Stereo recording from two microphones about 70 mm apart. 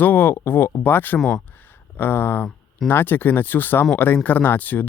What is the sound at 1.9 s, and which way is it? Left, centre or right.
Speech, left.